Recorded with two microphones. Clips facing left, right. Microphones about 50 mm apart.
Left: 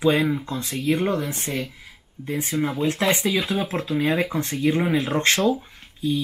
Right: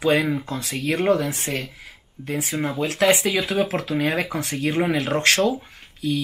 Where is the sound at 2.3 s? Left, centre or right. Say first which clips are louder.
Left 1 dB; right.